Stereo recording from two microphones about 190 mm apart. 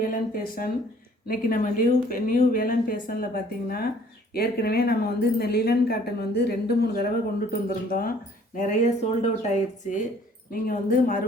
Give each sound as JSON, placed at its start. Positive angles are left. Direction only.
{"t": 0.0, "sound": "speech", "side_deg": 50}
{"t": 8.5, "sound": "speech", "side_deg": 40}